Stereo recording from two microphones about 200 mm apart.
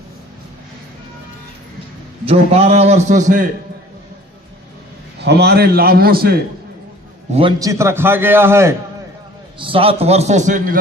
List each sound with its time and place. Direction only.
2.2 s a man's voice: 30° right (ahead or behind)
5.2 s a man's voice: 55° right (ahead or behind)
7.3 s a man's voice: 35° right (ahead or behind)
7.6 s a man's voice: 15° right (ahead or behind)
9.6 s a man's voice: 25° right (ahead or behind)